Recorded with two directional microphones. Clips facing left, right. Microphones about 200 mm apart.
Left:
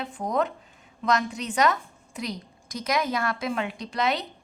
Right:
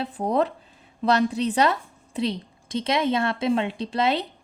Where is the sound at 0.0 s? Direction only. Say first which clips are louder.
Right 4 dB; 35° right (ahead or behind).